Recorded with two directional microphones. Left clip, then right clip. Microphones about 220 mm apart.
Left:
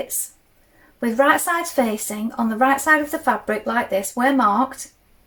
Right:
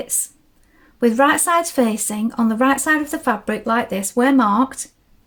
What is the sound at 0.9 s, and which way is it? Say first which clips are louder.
Speech: right 3 dB; 50° right (ahead or behind).